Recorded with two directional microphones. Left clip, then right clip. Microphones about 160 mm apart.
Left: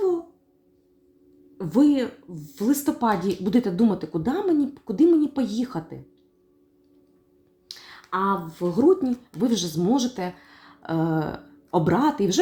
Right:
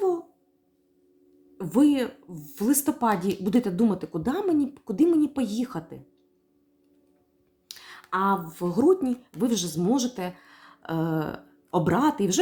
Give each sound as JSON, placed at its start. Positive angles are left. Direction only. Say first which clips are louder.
{"t": 1.5, "sound": "speech", "louder": "left 2 dB", "side_deg": -20}
{"t": 7.7, "sound": "a sound", "louder": "left 1 dB", "side_deg": -15}
{"t": 8.7, "sound": "speech", "louder": "left 2 dB", "side_deg": -15}